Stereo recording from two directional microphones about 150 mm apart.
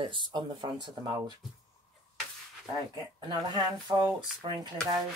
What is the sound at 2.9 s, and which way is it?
Speech, 30° right (ahead or behind).